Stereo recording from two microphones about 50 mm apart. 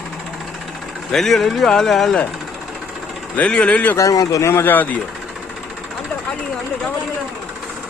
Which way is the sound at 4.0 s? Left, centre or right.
Left.